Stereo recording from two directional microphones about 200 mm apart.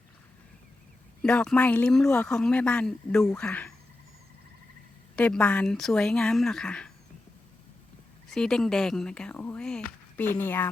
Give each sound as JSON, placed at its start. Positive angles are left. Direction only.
{"t": 1.2, "sound": "speech", "side_deg": 5}
{"t": 5.1, "sound": "speech", "side_deg": 5}
{"t": 8.3, "sound": "speech", "side_deg": 5}